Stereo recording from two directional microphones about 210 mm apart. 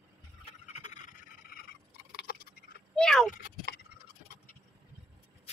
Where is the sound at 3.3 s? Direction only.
40° left (ahead or behind).